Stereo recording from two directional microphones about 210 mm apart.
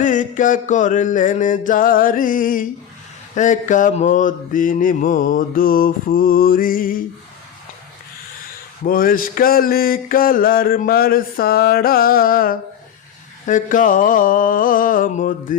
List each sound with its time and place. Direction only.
0.0 s mantra: 35° left (ahead or behind)
8.8 s mantra: 45° left (ahead or behind)